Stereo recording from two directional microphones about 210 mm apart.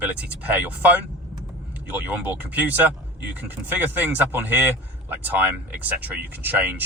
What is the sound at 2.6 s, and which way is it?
Speech, 5° right (ahead or behind).